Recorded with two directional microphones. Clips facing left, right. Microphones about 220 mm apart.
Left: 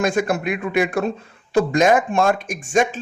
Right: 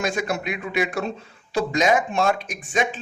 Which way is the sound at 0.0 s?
50° left (ahead or behind).